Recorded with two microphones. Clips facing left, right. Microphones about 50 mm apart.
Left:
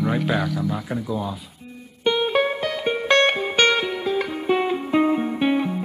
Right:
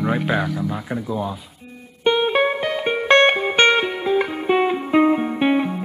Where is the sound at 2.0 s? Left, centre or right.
Centre.